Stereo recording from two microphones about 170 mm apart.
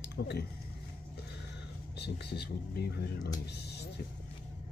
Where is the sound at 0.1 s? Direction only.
75° left (ahead or behind).